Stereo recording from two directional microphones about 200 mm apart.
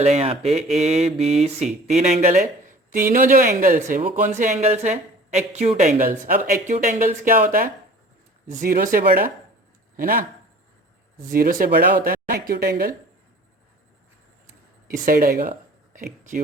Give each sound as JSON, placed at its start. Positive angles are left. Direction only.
{"t": 0.0, "sound": "speech", "side_deg": -30}
{"t": 11.3, "sound": "speech", "side_deg": -45}
{"t": 14.9, "sound": "speech", "side_deg": -45}